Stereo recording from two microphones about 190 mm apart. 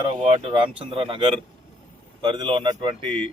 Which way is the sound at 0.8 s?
30° right (ahead or behind).